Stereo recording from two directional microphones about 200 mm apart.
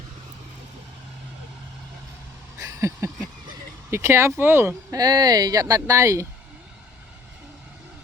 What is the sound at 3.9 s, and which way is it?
Speech, 15° right (ahead or behind).